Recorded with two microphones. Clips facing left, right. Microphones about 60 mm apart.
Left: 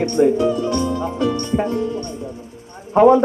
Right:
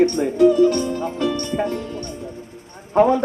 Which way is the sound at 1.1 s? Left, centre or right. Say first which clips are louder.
Left 4 dB; right.